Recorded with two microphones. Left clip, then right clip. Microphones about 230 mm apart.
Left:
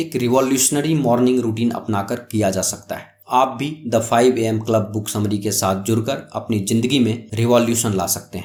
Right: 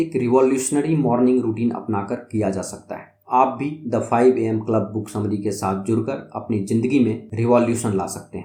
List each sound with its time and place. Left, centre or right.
0.0 s speech: left
2.5 s speech: left
2.9 s speech: left